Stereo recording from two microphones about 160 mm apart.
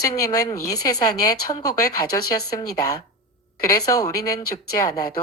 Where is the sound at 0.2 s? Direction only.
20° left (ahead or behind).